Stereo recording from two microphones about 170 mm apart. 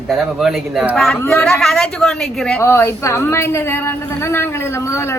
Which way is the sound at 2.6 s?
15° left (ahead or behind).